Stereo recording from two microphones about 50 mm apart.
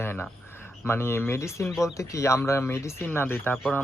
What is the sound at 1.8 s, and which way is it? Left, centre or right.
Speech, left.